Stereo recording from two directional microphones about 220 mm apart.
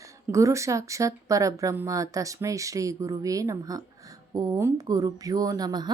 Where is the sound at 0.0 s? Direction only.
15° right (ahead or behind).